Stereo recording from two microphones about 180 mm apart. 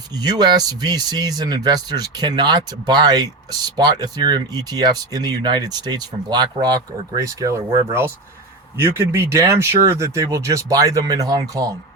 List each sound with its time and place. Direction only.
0.2 s speech: 20° right (ahead or behind)